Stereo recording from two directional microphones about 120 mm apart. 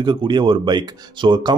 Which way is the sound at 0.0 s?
40° right (ahead or behind).